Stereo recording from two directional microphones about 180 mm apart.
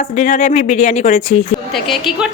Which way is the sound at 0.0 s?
45° left (ahead or behind).